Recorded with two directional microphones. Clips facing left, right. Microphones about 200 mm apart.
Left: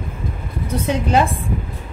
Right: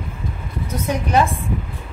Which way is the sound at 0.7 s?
30° left (ahead or behind).